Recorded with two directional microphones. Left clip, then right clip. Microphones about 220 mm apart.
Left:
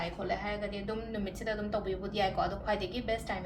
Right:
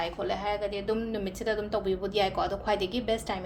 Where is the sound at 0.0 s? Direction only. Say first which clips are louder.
Right 4 dB; 50° right (ahead or behind).